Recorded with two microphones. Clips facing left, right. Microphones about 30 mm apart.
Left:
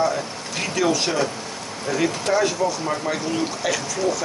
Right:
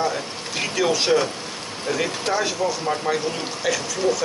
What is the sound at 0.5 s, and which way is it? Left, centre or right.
Speech, centre.